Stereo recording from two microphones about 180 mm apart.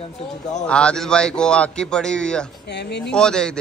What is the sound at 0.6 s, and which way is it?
A man's voice, 5° left (ahead or behind).